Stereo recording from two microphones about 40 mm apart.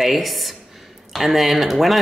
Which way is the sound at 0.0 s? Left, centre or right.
Centre.